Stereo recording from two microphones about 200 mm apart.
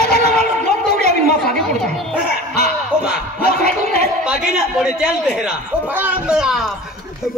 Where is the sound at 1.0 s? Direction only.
50° left (ahead or behind).